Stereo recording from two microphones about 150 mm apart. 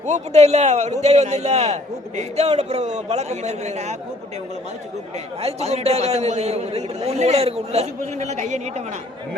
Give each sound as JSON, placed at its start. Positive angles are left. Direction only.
{"t": 0.0, "sound": "a man's voice", "side_deg": -50}
{"t": 5.4, "sound": "a man's voice", "side_deg": -45}